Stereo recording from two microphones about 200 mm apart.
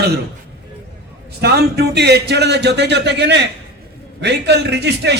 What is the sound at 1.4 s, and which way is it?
Speech, 55° right (ahead or behind).